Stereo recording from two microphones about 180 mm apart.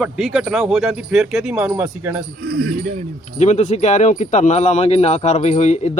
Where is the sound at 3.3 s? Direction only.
40° left (ahead or behind).